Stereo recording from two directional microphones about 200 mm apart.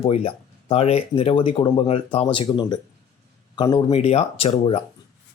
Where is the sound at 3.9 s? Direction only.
30° left (ahead or behind).